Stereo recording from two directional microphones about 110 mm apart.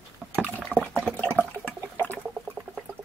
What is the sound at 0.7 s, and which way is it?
Water, 15° right (ahead or behind).